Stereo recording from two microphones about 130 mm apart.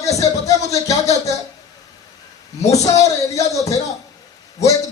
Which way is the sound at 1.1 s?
25° left (ahead or behind).